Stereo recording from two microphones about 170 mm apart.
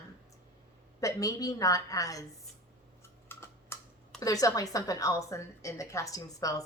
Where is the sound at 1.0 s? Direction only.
20° left (ahead or behind).